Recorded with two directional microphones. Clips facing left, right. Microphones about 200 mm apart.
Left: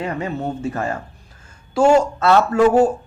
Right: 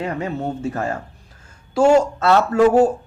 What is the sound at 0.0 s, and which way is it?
Speech, 45° right (ahead or behind).